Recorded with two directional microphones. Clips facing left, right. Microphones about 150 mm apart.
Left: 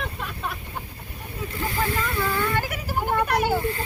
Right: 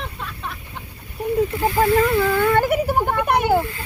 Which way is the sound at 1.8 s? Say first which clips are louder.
Right 10 dB; 55° right (ahead or behind).